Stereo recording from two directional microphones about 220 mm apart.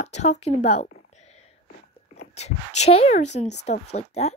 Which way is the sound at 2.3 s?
30° left (ahead or behind).